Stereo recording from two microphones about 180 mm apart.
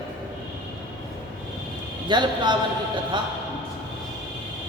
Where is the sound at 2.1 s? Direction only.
25° right (ahead or behind).